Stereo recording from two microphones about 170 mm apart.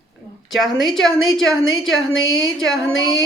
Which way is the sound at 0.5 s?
Centre (ahead or behind).